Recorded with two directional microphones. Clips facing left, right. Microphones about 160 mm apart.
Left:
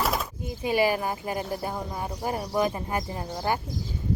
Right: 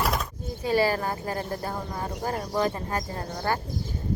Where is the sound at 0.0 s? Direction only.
Centre (ahead or behind).